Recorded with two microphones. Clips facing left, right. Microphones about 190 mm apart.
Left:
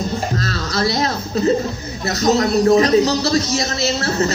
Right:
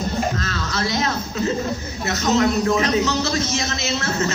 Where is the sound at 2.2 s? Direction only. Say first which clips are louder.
Left 4 dB; 35° left (ahead or behind).